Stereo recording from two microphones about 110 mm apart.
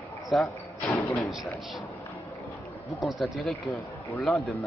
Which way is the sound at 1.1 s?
Centre (ahead or behind).